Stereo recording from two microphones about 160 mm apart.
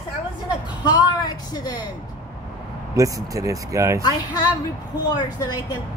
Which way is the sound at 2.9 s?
20° right (ahead or behind).